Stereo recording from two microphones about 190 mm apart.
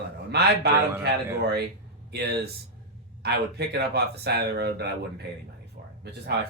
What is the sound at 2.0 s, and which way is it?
Speech, 60° right (ahead or behind).